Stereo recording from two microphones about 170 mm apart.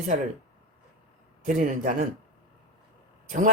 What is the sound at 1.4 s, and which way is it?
Speech, 50° right (ahead or behind).